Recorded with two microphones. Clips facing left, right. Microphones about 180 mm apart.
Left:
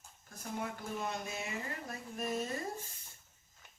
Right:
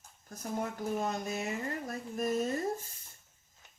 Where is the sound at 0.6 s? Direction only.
45° right (ahead or behind).